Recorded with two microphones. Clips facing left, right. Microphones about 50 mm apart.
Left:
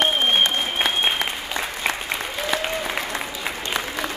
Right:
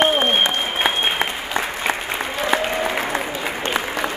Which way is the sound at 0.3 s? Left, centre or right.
Centre.